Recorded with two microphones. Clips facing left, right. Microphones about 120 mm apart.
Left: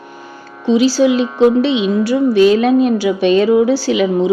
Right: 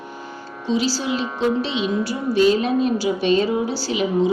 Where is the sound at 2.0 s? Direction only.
75° left (ahead or behind).